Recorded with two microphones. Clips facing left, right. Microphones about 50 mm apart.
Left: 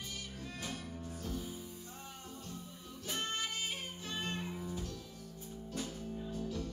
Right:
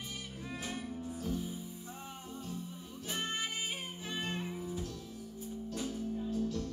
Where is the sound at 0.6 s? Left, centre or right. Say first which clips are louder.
Right 4 dB; centre.